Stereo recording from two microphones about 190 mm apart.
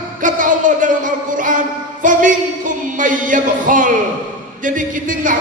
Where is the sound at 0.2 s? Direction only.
45° right (ahead or behind).